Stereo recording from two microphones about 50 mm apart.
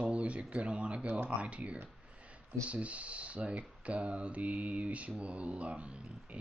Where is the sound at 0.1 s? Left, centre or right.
Right.